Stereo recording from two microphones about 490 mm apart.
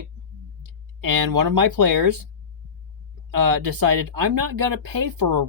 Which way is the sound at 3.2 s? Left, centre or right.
Right.